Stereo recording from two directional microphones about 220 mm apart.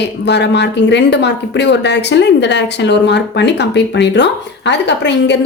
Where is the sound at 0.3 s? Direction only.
50° left (ahead or behind).